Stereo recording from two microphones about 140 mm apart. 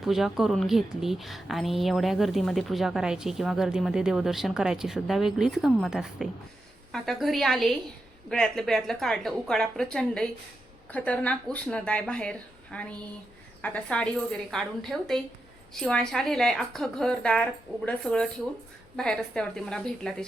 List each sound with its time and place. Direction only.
0.0 s a woman's voice: centre (ahead or behind)